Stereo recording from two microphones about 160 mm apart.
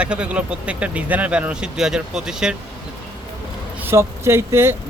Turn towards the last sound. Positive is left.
turn(degrees=-15)  # may be behind; listen again after turning